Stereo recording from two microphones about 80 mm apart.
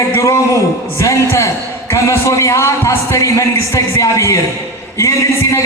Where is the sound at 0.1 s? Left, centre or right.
Left.